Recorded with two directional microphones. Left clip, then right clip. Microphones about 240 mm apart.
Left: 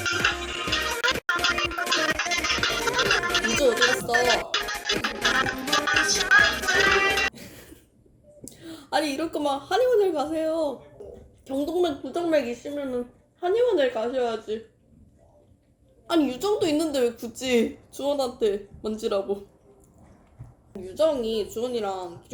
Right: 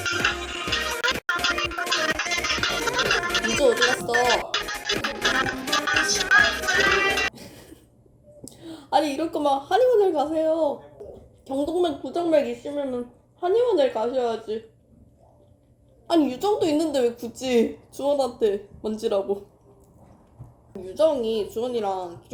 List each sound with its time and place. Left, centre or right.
0.0 s music: centre
8.4 s a woman's voice: centre
13.5 s a woman's voice: right
13.7 s a woman's voice: centre
16.0 s a woman's voice: centre
20.7 s a woman's voice: centre